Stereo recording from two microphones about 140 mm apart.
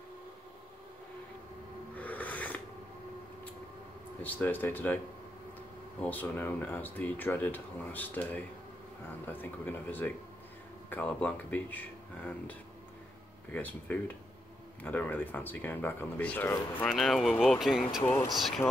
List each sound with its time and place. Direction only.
2.0 s a sound: 10° left (ahead or behind)
4.2 s speech: 10° left (ahead or behind)
13.5 s speech: 10° left (ahead or behind)
16.9 s speech: centre (ahead or behind)
18.0 s speech: 20° left (ahead or behind)